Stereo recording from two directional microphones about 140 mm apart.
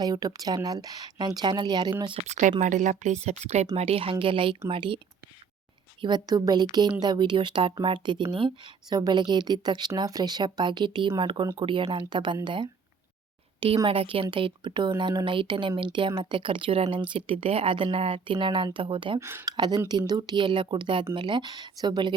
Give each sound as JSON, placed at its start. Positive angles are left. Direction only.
{"t": 0.0, "sound": "a woman's voice", "side_deg": -30}
{"t": 2.2, "sound": "speech", "side_deg": -60}
{"t": 6.0, "sound": "speech", "side_deg": -30}
{"t": 13.8, "sound": "speech", "side_deg": -40}
{"t": 19.2, "sound": "speech", "side_deg": -15}
{"t": 19.5, "sound": "speech", "side_deg": -30}